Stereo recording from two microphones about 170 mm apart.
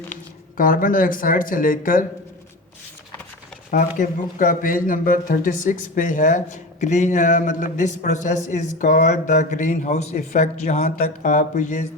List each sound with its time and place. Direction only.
0.5 s speech: 55° left (ahead or behind)
3.7 s speech: 50° left (ahead or behind)